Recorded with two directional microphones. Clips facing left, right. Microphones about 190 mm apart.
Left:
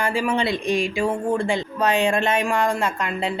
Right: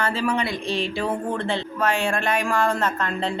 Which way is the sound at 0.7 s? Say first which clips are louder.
Left 1 dB; 10° left (ahead or behind).